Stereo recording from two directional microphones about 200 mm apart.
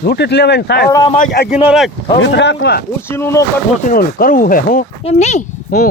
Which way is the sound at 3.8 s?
45° left (ahead or behind).